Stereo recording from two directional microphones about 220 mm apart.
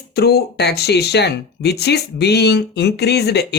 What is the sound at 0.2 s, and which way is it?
Speech, 45° left (ahead or behind).